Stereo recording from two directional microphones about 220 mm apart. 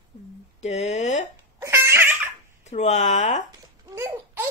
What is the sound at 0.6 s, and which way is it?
Speech, 30° left (ahead or behind).